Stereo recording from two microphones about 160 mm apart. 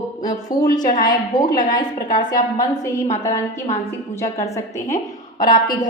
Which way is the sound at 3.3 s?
45° left (ahead or behind).